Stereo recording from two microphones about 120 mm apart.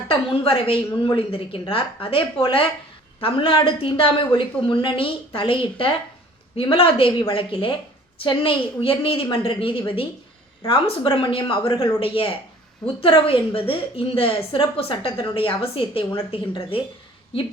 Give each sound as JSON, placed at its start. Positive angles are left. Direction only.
{"t": 0.1, "sound": "a woman's voice", "side_deg": 50}